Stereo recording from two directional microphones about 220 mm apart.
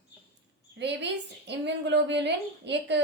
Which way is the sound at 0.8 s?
50° right (ahead or behind).